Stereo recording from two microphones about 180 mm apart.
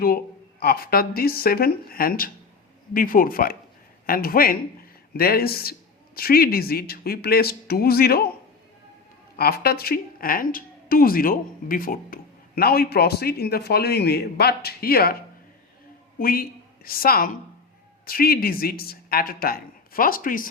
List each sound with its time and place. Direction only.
0.6 s a woman's voice: 55° left (ahead or behind)
9.3 s a woman's voice: 60° left (ahead or behind)